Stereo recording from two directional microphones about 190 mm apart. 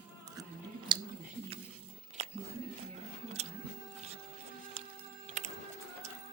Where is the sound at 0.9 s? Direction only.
25° right (ahead or behind).